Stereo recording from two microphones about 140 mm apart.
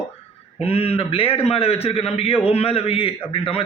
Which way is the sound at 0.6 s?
45° left (ahead or behind).